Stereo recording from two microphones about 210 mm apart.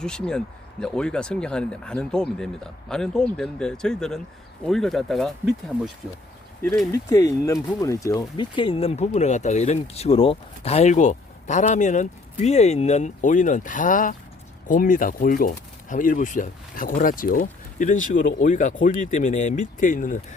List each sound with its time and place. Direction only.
0.0 s speech: 5° left (ahead or behind)
6.9 s speech: 15° left (ahead or behind); by 20.2 s 40° left (ahead or behind)